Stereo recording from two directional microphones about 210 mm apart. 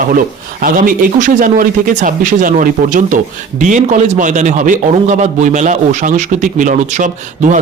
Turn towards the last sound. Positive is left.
turn(degrees=-35)  # may be behind; listen again after turning